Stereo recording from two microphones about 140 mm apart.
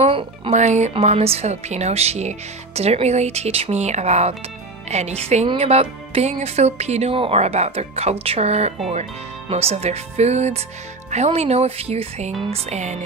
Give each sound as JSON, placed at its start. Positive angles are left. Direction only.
{"t": 0.0, "sound": "speech", "side_deg": -45}
{"t": 0.6, "sound": "speech", "side_deg": -55}